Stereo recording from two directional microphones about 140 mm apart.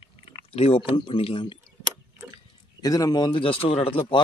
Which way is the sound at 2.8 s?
25° left (ahead or behind).